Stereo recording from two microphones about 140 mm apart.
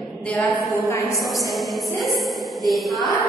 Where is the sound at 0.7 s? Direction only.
20° left (ahead or behind).